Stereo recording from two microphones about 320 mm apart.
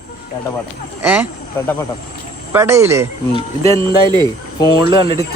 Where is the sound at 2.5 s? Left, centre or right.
Centre.